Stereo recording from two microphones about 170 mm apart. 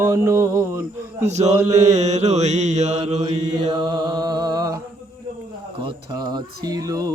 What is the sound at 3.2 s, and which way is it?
Mantra, 25° right (ahead or behind).